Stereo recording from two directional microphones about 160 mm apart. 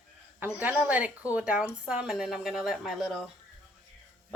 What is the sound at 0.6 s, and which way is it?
A woman's voice, 10° right (ahead or behind).